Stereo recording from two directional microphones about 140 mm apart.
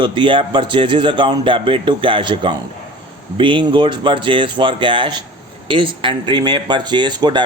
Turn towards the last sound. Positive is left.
turn(degrees=-30)  # may be behind; listen again after turning